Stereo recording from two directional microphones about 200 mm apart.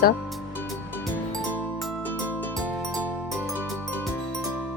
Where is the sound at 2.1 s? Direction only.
5° left (ahead or behind).